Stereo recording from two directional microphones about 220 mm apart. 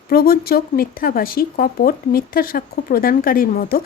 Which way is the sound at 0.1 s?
45° left (ahead or behind).